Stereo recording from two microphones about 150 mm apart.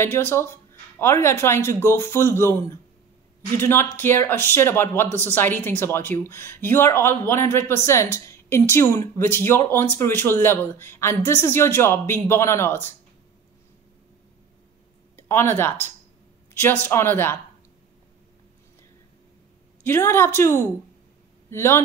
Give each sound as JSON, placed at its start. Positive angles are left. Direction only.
{"t": 0.0, "sound": "speech", "side_deg": 15}
{"t": 15.1, "sound": "speech", "side_deg": 15}
{"t": 19.8, "sound": "a woman's voice", "side_deg": 15}